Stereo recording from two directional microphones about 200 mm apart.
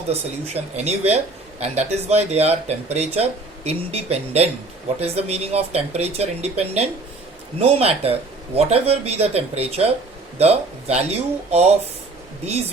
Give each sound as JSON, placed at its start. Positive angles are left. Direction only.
{"t": 0.1, "sound": "speech", "side_deg": -30}